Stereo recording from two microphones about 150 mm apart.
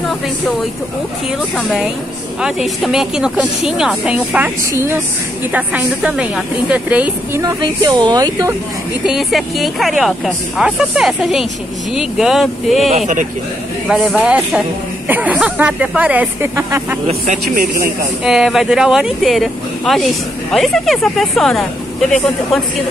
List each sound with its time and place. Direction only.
2.4 s a woman's voice: centre (ahead or behind)
7.4 s speech: 25° right (ahead or behind)
9.0 s speech: centre (ahead or behind)
12.9 s speech: 55° right (ahead or behind)
13.8 s a woman's voice: 5° right (ahead or behind)
17.6 s speech: 75° right (ahead or behind)
18.2 s speech: centre (ahead or behind)